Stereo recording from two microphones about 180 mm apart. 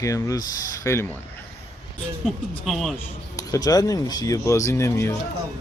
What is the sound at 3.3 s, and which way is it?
Speech, 20° left (ahead or behind).